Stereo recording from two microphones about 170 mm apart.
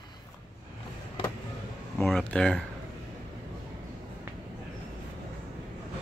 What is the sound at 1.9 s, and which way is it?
Speech, 5° left (ahead or behind).